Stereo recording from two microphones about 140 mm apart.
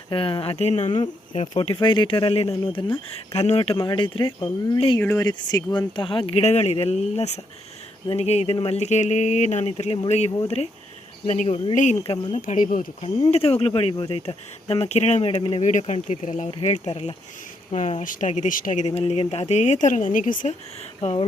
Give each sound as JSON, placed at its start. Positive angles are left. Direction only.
{"t": 0.1, "sound": "speech", "side_deg": 40}
{"t": 1.5, "sound": "speech", "side_deg": 35}
{"t": 3.6, "sound": "speech", "side_deg": 35}
{"t": 4.9, "sound": "speech", "side_deg": 15}
{"t": 5.2, "sound": "speech", "side_deg": 30}
{"t": 11.7, "sound": "speech", "side_deg": 60}
{"t": 12.0, "sound": "speech", "side_deg": 40}
{"t": 12.4, "sound": "speech", "side_deg": 65}
{"t": 13.3, "sound": "speech", "side_deg": 45}
{"t": 15.6, "sound": "speech", "side_deg": 60}
{"t": 16.6, "sound": "speech", "side_deg": 50}
{"t": 21.0, "sound": "speech", "side_deg": 50}